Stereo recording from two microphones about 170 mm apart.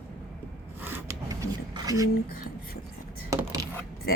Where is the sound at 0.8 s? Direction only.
10° right (ahead or behind).